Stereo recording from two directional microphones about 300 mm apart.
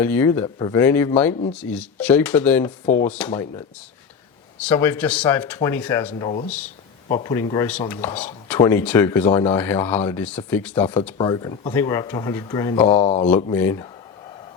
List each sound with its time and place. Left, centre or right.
0.0 s speech: centre
6.1 s speech: centre
13.0 s speech: left
13.2 s speech: centre